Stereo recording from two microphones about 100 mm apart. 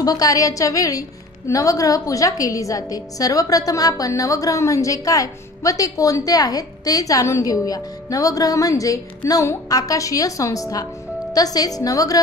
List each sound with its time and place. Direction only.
0.0 s a woman's voice: 40° left (ahead or behind)